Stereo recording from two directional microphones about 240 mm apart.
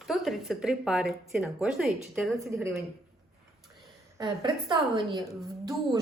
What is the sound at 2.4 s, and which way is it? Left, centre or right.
Speech, centre.